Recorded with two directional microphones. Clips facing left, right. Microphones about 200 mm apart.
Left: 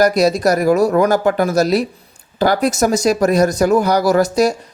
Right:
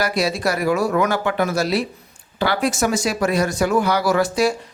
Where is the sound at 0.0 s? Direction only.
40° left (ahead or behind).